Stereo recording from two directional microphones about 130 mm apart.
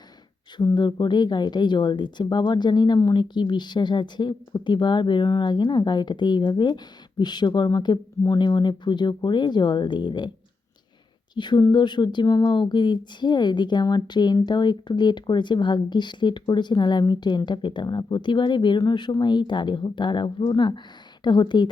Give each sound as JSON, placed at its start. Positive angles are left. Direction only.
{"t": 0.5, "sound": "speech", "side_deg": 35}
{"t": 11.3, "sound": "speech", "side_deg": 35}